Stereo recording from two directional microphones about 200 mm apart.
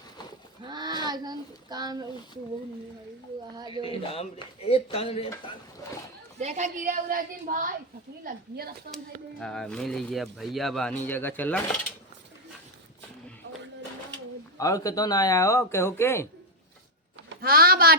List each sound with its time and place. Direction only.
0.6 s speech: 20° right (ahead or behind)
3.8 s speech: 30° left (ahead or behind)
6.4 s a woman's voice: 35° right (ahead or behind)
9.4 s speech: 5° left (ahead or behind)
14.6 s speech: 15° left (ahead or behind)
17.2 s speech: 50° right (ahead or behind)